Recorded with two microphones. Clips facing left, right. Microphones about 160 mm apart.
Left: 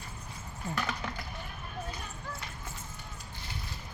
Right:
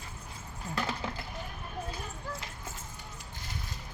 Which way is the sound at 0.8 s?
30° right (ahead or behind).